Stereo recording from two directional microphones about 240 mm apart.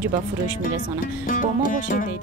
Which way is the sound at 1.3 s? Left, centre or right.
Left.